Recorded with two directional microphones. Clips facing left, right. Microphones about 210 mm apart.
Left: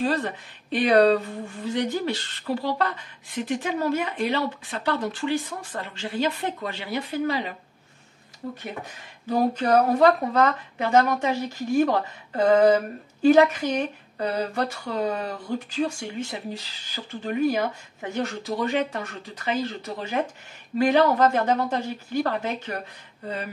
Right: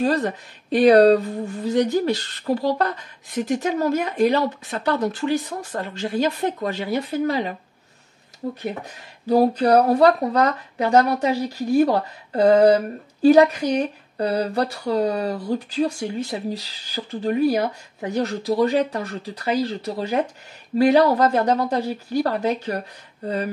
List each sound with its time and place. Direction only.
0.0 s speech: 40° right (ahead or behind)
9.3 s speech: 35° right (ahead or behind)